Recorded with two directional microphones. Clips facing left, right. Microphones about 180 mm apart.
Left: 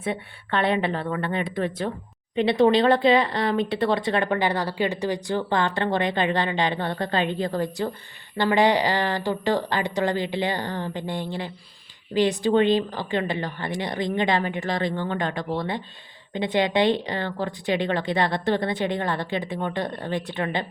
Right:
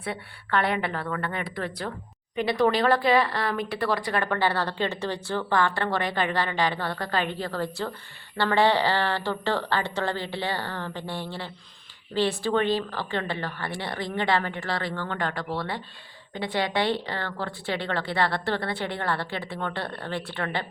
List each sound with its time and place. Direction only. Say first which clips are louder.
0.0 s speech: left 5 dB; 20° left (ahead or behind)